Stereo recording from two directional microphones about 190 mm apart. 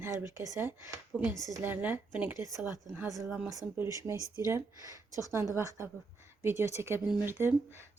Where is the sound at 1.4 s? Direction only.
15° right (ahead or behind).